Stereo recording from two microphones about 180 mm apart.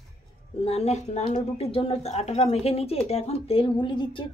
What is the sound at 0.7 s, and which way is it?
A woman's voice, 35° left (ahead or behind).